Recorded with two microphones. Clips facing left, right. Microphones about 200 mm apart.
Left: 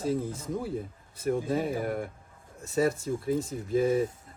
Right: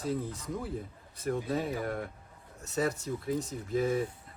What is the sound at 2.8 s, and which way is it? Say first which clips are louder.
Speech: left 5 dB; 25° left (ahead or behind).